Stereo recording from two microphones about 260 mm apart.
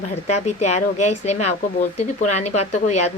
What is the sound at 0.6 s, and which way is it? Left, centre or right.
A woman's voice, left.